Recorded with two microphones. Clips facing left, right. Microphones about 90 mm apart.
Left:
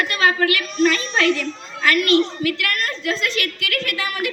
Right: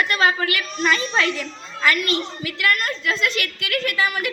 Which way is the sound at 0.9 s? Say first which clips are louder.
Left 3 dB; 55° left (ahead or behind).